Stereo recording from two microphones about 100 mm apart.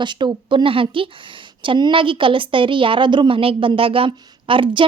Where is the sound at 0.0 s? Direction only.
50° right (ahead or behind).